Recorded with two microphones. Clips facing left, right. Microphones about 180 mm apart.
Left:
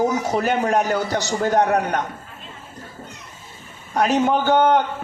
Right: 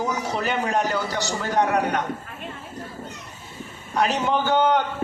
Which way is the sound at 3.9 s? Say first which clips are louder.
Left 4 dB; 45° left (ahead or behind).